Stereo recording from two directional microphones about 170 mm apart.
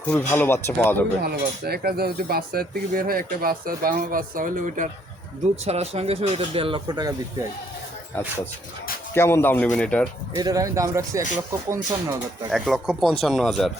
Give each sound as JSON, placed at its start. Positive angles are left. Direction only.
{"t": 0.1, "sound": "speech", "side_deg": 15}
{"t": 1.2, "sound": "speech", "side_deg": -65}
{"t": 5.6, "sound": "speech", "side_deg": -35}
{"t": 9.1, "sound": "speech", "side_deg": 15}
{"t": 10.3, "sound": "speech", "side_deg": -20}
{"t": 12.5, "sound": "speech", "side_deg": 0}